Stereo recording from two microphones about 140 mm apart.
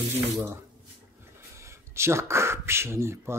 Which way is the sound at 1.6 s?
20° right (ahead or behind).